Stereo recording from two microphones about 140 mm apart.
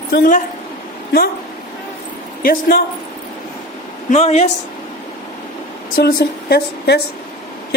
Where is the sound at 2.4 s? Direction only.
90° left.